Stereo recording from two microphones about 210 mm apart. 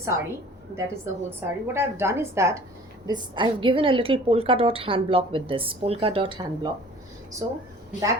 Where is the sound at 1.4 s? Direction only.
10° right (ahead or behind).